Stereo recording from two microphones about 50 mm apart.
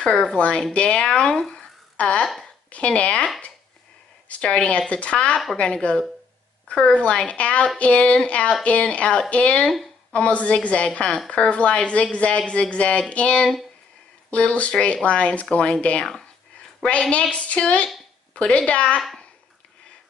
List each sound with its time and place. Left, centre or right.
0.0 s a woman's voice: centre
1.5 s a sound: left
2.7 s a woman's voice: left
4.3 s a woman's voice: left
17.2 s a woman's voice: left